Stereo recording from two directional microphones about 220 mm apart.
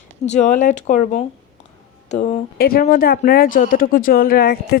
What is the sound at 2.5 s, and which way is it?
A woman's voice, 45° left (ahead or behind).